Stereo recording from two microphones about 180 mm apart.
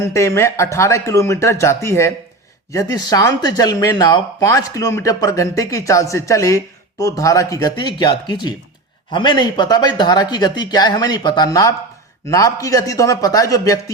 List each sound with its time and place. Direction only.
0.0 s speech: 15° left (ahead or behind)